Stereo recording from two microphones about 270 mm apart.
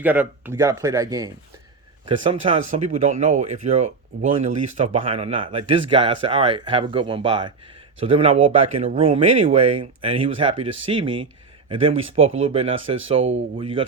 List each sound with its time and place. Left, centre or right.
0.0 s speech: centre